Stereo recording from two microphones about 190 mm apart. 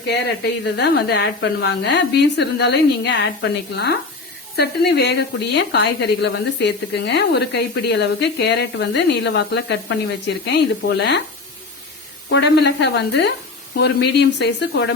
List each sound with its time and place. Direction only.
0.6 s a woman's voice: 60° left (ahead or behind)
4.5 s a woman's voice: 60° left (ahead or behind)
12.3 s a woman's voice: 60° left (ahead or behind)